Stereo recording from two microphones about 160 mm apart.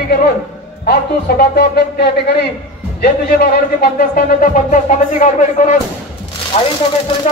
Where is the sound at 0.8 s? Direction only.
85° left.